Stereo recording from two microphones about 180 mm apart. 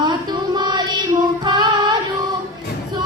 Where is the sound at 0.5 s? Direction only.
25° right (ahead or behind).